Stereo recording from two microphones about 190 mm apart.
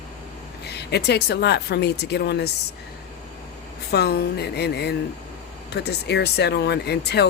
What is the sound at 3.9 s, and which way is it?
Speech, 60° left (ahead or behind).